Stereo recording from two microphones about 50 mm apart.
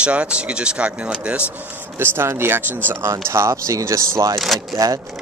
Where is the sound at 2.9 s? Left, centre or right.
Right.